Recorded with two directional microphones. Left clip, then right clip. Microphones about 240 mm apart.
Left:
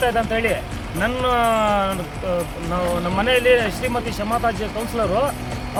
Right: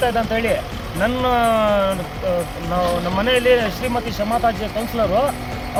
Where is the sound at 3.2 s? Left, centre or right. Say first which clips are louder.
Even; centre.